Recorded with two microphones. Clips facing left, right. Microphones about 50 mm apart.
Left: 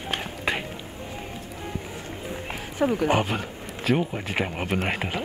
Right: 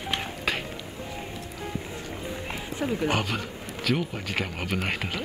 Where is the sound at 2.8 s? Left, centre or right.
Left.